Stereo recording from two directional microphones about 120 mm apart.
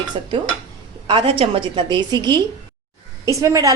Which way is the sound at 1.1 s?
50° right (ahead or behind).